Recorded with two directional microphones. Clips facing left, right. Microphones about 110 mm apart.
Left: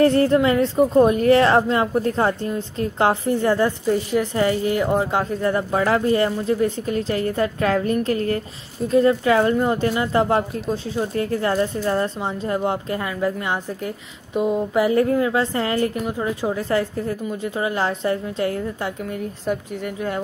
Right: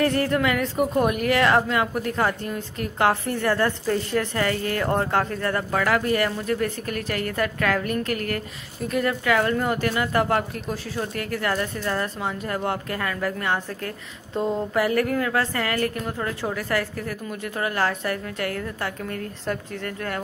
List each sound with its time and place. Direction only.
0.0 s speech: 30° left (ahead or behind)